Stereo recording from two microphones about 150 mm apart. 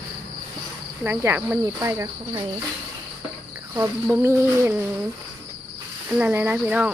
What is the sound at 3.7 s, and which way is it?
Speech, 15° right (ahead or behind).